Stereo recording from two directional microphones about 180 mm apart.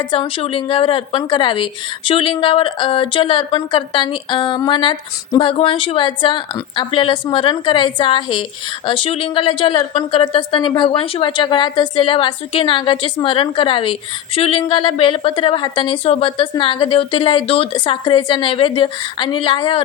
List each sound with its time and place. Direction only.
0.0 s a woman's voice: 30° left (ahead or behind)